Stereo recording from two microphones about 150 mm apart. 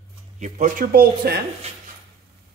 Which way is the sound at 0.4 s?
60° right (ahead or behind).